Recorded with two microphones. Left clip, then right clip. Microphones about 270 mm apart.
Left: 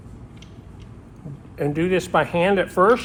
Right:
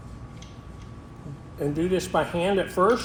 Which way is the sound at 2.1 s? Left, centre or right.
Left.